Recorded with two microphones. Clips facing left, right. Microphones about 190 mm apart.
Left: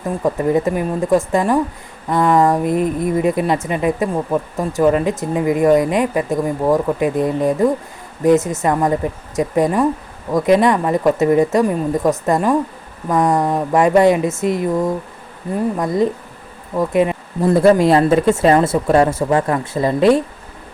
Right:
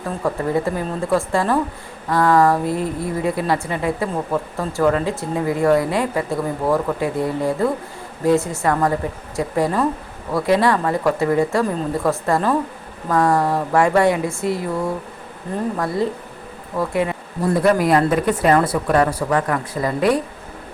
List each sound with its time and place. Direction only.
0.2 s a woman's voice: 20° left (ahead or behind)